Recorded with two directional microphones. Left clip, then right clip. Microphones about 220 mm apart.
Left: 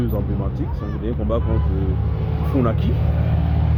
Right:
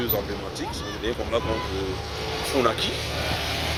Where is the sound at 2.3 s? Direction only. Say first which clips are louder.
Even; 15° right (ahead or behind).